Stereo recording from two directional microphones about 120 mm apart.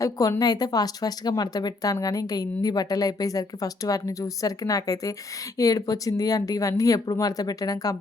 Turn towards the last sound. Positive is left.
turn(degrees=30)  # may be behind; listen again after turning